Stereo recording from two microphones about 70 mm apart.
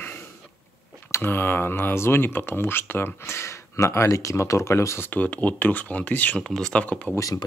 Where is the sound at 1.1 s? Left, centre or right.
Left.